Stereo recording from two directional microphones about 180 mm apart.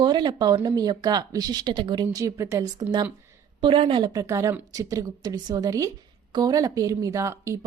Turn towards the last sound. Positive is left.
turn(degrees=-15)  # may be behind; listen again after turning